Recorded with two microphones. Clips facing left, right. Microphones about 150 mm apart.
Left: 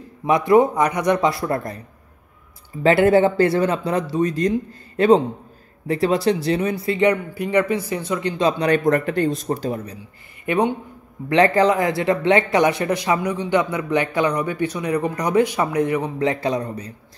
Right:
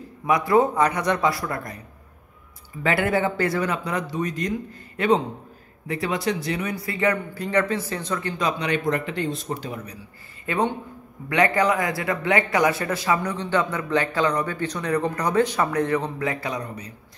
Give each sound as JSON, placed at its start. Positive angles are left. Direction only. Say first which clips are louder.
{"t": 0.3, "sound": "a man's voice", "louder": "left 4 dB", "side_deg": 20}
{"t": 2.8, "sound": "speech", "louder": "left 8 dB", "side_deg": 30}
{"t": 10.4, "sound": "a man's voice", "louder": "left 4 dB", "side_deg": 20}
{"t": 16.2, "sound": "a man's voice", "louder": "left 6 dB", "side_deg": 25}